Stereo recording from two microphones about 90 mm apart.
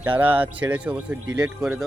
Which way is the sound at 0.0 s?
20° right (ahead or behind).